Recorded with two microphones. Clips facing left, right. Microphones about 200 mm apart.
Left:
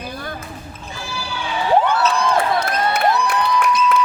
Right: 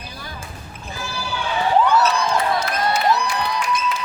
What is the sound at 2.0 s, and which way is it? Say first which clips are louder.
Crowd: left 2 dB; 55° left (ahead or behind).